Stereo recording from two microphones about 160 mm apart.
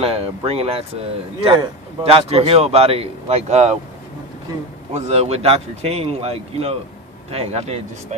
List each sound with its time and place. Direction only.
0.0 s speech: 40° right (ahead or behind)
4.9 s speech: 45° right (ahead or behind)